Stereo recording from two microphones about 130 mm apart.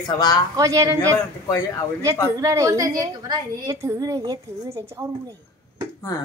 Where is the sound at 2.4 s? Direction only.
25° right (ahead or behind).